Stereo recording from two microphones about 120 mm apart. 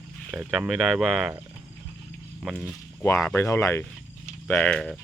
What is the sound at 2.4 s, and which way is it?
Speech, 5° right (ahead or behind).